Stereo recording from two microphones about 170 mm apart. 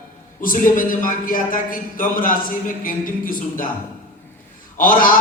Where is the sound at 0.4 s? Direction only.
55° left (ahead or behind).